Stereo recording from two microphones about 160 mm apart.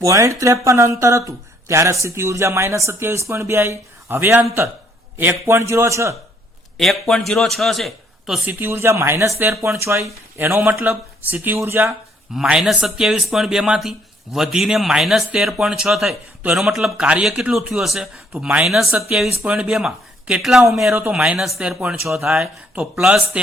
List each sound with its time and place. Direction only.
0.0 s speech: 20° right (ahead or behind)
6.7 s a man's voice: centre (ahead or behind)
8.4 s speech: 15° right (ahead or behind)
12.3 s a man's voice: 5° right (ahead or behind)